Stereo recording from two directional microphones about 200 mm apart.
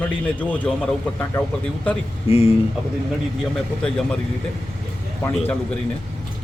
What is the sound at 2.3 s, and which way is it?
Speech, 30° left (ahead or behind).